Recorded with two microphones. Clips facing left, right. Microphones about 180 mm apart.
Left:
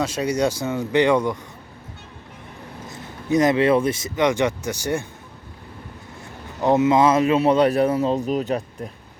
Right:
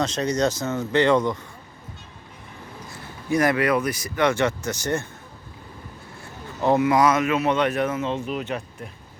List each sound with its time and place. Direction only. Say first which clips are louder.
0.0 s speech: left 1 dB; 10° left (ahead or behind)
2.9 s speech: left 3 dB; 20° left (ahead or behind)
6.6 s speech: left 2 dB; 20° left (ahead or behind); by 8.9 s 35° left (ahead or behind)